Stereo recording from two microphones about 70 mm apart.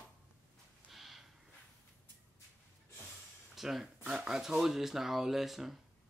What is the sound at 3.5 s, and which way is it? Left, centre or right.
Speech, centre.